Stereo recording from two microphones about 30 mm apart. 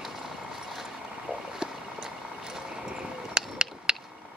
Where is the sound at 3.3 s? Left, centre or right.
Right.